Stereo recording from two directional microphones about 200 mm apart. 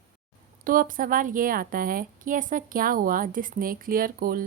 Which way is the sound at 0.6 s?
45° right (ahead or behind).